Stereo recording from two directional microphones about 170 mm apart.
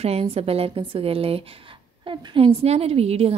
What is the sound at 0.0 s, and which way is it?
A woman's voice, 35° right (ahead or behind).